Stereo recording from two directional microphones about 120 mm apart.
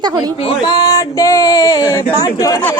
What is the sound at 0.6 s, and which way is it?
Speech, 35° left (ahead or behind).